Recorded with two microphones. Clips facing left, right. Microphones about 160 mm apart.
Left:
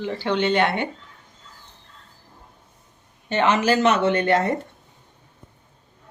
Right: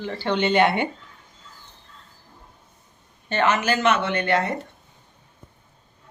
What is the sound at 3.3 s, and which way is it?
A woman's voice, 25° left (ahead or behind).